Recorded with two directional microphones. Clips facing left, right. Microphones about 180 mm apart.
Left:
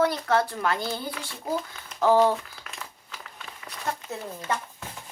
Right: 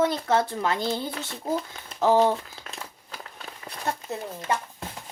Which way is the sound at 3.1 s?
40° right (ahead or behind).